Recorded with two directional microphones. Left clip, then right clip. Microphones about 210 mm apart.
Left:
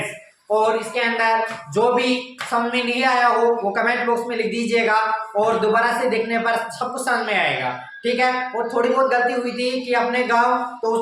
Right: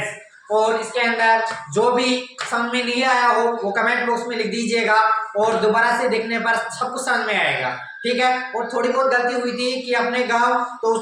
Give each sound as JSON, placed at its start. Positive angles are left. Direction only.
{"t": 0.5, "sound": "a woman's voice", "side_deg": 5}